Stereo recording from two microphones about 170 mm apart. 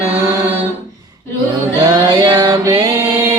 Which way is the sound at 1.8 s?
25° right (ahead or behind).